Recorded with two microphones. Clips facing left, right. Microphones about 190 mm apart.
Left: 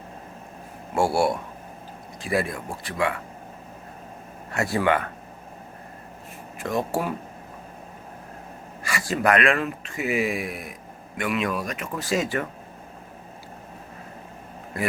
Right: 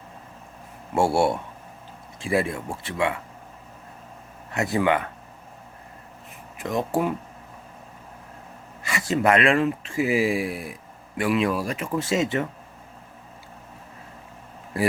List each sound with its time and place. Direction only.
0.9 s speech: 25° right (ahead or behind)
4.5 s speech: 20° right (ahead or behind)
6.6 s speech: 20° right (ahead or behind)
8.8 s speech: 20° right (ahead or behind)